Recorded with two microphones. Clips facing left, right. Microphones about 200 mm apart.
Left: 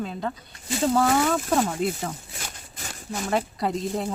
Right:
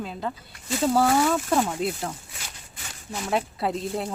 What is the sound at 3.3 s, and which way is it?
Speech, centre (ahead or behind).